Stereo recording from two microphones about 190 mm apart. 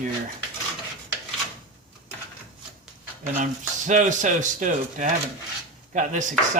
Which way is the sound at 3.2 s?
40° right (ahead or behind).